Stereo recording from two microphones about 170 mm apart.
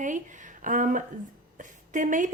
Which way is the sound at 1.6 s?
50° right (ahead or behind).